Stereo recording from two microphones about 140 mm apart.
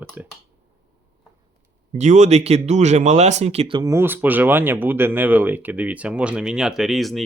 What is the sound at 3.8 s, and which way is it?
Speech, 20° right (ahead or behind).